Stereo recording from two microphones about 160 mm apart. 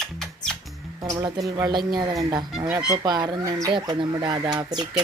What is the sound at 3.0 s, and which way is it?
Speech, 25° right (ahead or behind).